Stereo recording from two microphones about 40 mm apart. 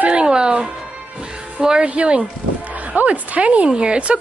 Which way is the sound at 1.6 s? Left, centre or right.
Right.